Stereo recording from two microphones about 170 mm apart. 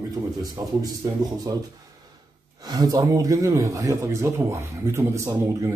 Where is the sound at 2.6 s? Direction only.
25° right (ahead or behind).